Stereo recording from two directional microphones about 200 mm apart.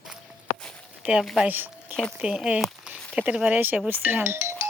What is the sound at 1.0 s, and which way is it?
A woman's voice, centre (ahead or behind).